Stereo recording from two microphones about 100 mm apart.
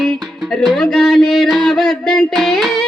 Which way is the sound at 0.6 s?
5° left (ahead or behind).